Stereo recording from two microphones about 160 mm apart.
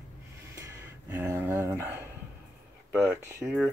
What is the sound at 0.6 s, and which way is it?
Speech, 15° right (ahead or behind).